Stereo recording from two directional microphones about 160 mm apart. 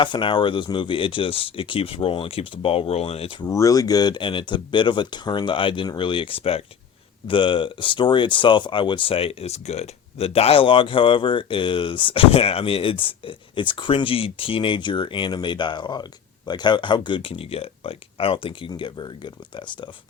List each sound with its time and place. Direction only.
0.0 s speech: 30° left (ahead or behind)
3.4 s speech: 20° left (ahead or behind)